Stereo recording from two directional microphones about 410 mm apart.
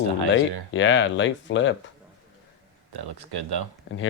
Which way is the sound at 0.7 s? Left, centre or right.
Left.